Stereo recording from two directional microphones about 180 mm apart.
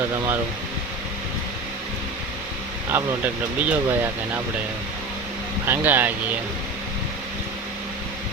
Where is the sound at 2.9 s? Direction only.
10° right (ahead or behind).